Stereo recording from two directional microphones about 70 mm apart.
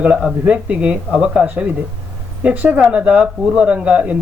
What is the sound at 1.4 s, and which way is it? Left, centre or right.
Speech, right.